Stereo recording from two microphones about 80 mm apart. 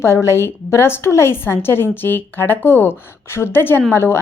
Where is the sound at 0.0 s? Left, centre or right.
Left.